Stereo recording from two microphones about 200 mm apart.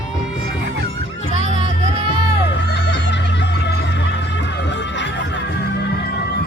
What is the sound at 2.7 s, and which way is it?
Music, 60° left (ahead or behind).